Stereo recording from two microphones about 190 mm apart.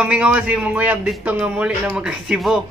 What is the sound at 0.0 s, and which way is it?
Speech, 5° right (ahead or behind).